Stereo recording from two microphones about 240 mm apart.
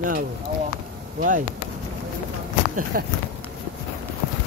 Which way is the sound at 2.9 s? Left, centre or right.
Right.